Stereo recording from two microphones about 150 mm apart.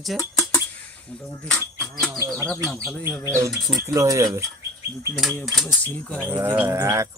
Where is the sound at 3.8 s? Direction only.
20° right (ahead or behind).